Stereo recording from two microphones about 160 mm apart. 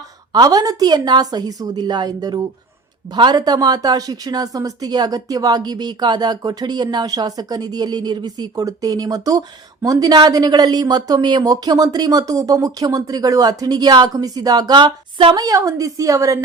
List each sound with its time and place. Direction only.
0.3 s speech: 25° right (ahead or behind)